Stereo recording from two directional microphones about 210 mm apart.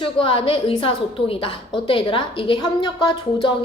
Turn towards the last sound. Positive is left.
turn(degrees=25)  # may be behind; listen again after turning